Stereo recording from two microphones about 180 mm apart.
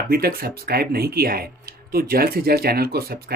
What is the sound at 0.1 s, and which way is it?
Speech, 55° right (ahead or behind).